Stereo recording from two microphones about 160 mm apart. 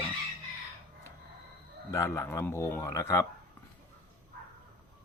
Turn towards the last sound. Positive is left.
turn(degrees=20)  # may be behind; listen again after turning